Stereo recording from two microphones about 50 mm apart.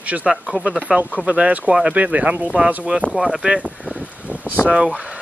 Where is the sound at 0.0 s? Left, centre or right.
Right.